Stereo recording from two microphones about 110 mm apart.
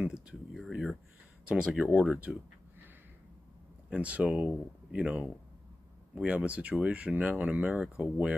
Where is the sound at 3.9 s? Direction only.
15° right (ahead or behind).